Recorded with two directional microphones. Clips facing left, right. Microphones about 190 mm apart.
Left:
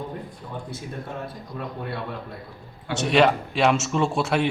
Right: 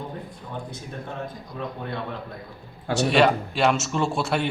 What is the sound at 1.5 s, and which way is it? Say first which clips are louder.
Speech: even; 5° left (ahead or behind).